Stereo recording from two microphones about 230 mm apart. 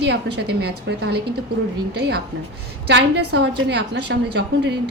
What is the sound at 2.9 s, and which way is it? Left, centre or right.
A woman's voice, right.